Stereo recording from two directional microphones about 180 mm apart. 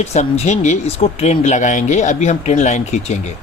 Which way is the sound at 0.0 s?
35° left (ahead or behind).